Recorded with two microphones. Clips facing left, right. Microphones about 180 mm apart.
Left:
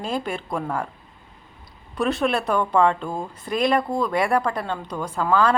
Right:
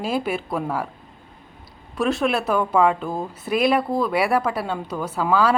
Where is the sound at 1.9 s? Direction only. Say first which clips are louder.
Right 1 dB; centre (ahead or behind).